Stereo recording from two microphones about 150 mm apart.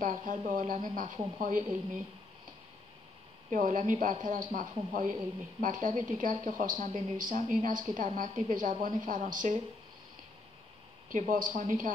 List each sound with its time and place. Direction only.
0.0 s speech: 60° right (ahead or behind)
3.4 s speech: 60° right (ahead or behind)
11.1 s speech: 65° right (ahead or behind)